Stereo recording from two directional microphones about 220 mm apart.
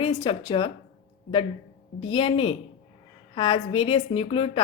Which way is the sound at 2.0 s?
25° left (ahead or behind).